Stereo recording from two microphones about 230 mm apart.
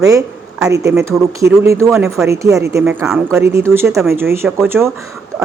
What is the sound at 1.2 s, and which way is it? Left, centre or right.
Speech, centre.